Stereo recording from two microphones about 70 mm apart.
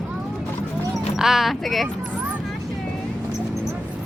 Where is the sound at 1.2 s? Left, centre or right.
Centre.